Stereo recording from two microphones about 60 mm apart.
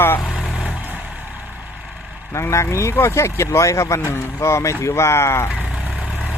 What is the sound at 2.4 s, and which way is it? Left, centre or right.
Speech, left.